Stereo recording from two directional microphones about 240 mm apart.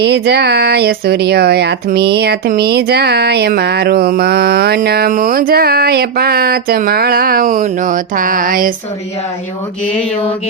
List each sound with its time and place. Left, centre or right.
0.0 s speech: right